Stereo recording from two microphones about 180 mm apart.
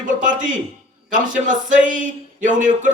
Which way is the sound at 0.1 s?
45° right (ahead or behind).